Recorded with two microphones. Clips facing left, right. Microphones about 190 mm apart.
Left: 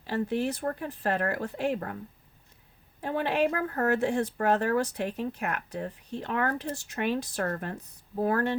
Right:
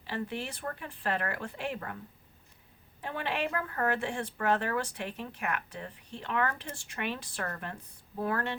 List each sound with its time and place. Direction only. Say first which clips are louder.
0.1 s speech: left 8 dB; 40° left (ahead or behind)
3.0 s speech: left 7 dB; 40° left (ahead or behind)